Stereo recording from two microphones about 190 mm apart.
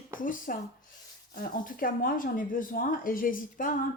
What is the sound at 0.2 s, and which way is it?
Speech, 45° left (ahead or behind).